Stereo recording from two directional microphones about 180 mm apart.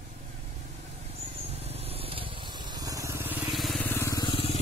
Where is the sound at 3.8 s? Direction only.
10° left (ahead or behind).